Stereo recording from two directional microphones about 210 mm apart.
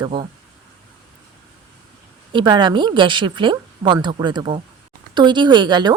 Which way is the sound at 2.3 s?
20° right (ahead or behind).